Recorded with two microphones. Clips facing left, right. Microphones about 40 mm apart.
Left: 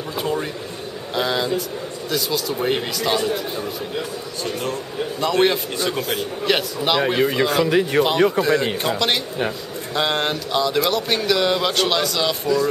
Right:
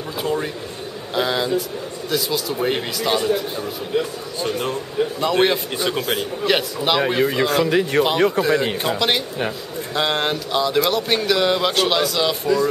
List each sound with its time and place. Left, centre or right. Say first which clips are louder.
0.2 s a sound: right 1 dB; centre
1.1 s a man's voice: right 1 dB; centre
4.4 s speech: right 3 dB; centre
5.2 s a man's voice: left 1 dB; centre